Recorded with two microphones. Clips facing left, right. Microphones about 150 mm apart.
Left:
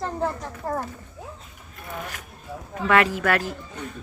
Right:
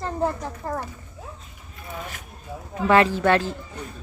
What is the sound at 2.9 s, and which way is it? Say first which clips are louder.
Speech: right 3 dB; 30° right (ahead or behind).